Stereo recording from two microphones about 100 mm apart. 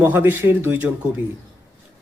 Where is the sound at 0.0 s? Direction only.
20° right (ahead or behind).